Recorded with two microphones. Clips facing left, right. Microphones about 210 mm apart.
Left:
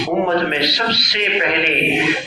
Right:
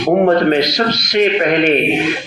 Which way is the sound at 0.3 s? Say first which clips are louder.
Right 6 dB; 45° right (ahead or behind).